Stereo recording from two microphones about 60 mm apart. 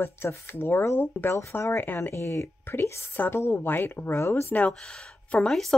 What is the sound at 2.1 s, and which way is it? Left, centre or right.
Speech, left.